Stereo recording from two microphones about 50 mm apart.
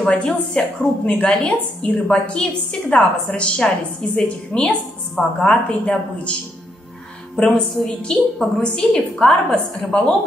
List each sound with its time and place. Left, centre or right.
0.0 s a woman's voice: centre
7.3 s a woman's voice: centre